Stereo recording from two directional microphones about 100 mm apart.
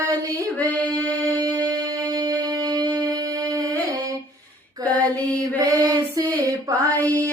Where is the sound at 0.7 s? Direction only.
15° left (ahead or behind).